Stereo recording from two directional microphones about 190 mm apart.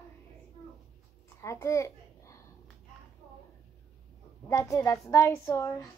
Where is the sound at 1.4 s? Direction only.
15° left (ahead or behind).